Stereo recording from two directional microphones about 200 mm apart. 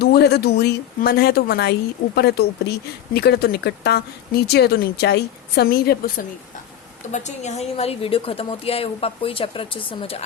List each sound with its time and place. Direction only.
0.0 s a woman's voice: 55° left (ahead or behind)
7.1 s a woman's voice: 35° left (ahead or behind)